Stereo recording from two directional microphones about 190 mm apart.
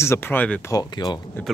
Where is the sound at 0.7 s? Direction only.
20° left (ahead or behind).